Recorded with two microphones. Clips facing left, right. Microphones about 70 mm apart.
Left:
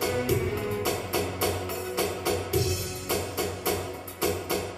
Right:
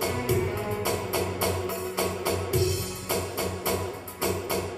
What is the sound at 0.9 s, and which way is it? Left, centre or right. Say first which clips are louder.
Music: right 1 dB; right.